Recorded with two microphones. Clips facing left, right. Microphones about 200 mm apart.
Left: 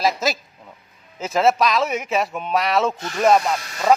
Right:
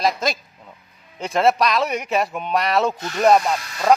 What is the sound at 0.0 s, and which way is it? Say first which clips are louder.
Speech: even; 5° left (ahead or behind).